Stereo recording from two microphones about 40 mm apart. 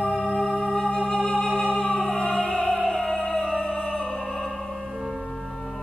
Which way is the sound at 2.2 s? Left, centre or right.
Centre.